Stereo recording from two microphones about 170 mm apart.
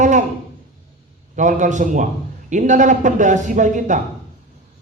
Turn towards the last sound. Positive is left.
turn(degrees=-45)  # may be behind; listen again after turning